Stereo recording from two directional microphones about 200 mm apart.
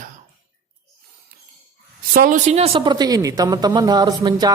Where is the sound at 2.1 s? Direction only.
45° right (ahead or behind); by 4.6 s 20° right (ahead or behind).